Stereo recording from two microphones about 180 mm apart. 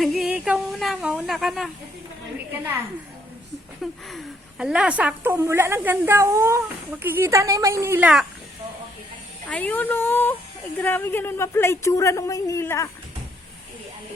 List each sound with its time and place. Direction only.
0.0 s a woman's voice: centre (ahead or behind)
4.1 s a woman's voice: 5° right (ahead or behind)
9.5 s a woman's voice: 10° left (ahead or behind)